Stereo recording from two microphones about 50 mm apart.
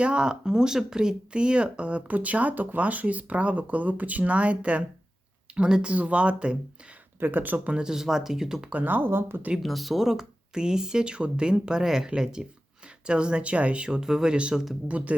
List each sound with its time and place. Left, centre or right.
0.0 s speech: centre
7.2 s speech: right
7.8 s speech: centre
8.7 s speech: right
9.6 s speech: centre; by 15.1 s right